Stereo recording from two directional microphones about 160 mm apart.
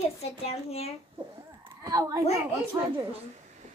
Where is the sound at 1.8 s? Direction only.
25° right (ahead or behind).